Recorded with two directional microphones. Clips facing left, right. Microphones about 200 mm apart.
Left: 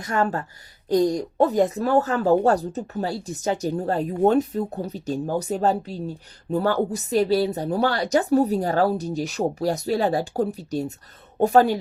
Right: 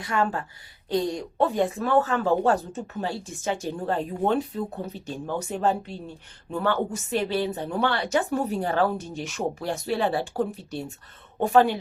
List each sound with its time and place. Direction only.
0.0 s a woman's voice: 40° left (ahead or behind)